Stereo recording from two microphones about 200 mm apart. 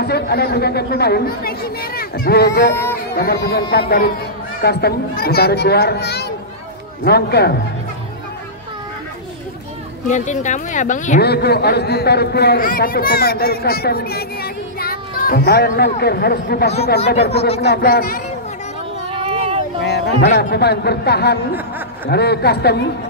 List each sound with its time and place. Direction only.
0.0 s a man's voice: 55° left (ahead or behind)
2.7 s speech: 10° left (ahead or behind)
3.2 s a man's voice: 50° left (ahead or behind)
10.0 s speech: 40° left (ahead or behind)
11.1 s a man's voice: 55° left (ahead or behind)
17.3 s speech: 30° left (ahead or behind)
17.6 s a man's voice: 50° left (ahead or behind)
19.0 s a sound: 25° right (ahead or behind)
19.8 s a man's voice: 55° left (ahead or behind)